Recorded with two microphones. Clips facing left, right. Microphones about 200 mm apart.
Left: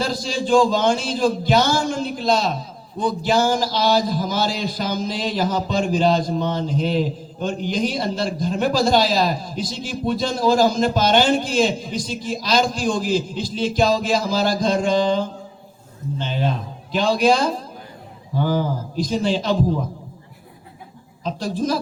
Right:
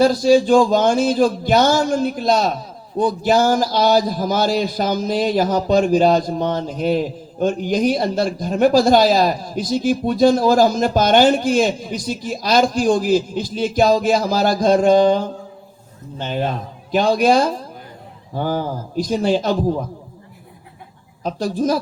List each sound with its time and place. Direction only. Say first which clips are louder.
0.0 s speech: right 11 dB; 50° right (ahead or behind)
21.2 s speech: right 3 dB; 50° right (ahead or behind)